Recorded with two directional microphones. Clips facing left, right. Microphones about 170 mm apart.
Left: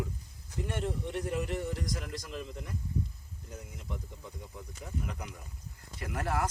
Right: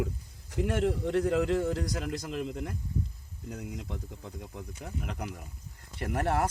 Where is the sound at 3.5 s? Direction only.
75° right (ahead or behind).